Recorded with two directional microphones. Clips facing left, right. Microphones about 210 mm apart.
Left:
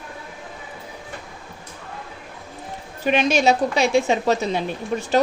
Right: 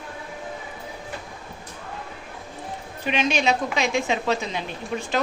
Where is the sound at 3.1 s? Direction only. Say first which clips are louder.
Left 5 dB; 40° left (ahead or behind).